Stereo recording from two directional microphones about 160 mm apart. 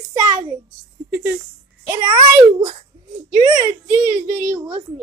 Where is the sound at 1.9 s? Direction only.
25° right (ahead or behind).